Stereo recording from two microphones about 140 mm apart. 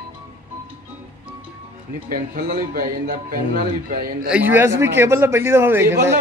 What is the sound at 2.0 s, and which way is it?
Speech, 90° right.